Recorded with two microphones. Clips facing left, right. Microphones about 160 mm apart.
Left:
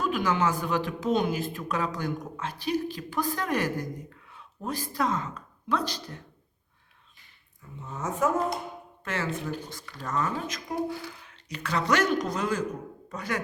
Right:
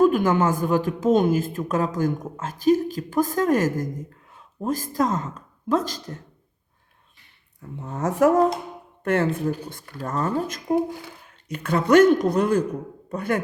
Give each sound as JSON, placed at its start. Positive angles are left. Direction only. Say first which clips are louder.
{"t": 0.0, "sound": "a woman's voice", "louder": "right 8 dB", "side_deg": -50}
{"t": 7.8, "sound": "a woman's voice", "louder": "right 8 dB", "side_deg": -65}
{"t": 9.0, "sound": "speech", "louder": "right 10 dB", "side_deg": -55}